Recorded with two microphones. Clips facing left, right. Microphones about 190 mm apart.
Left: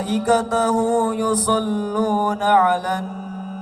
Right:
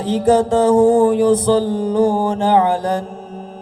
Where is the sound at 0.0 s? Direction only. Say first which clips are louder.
Right 4 dB; 30° right (ahead or behind).